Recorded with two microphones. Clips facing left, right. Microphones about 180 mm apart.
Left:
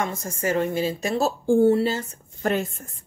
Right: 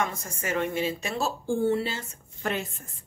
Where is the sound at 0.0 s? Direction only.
35° left (ahead or behind).